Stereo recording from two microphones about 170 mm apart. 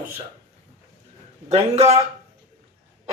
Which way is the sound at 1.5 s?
35° right (ahead or behind).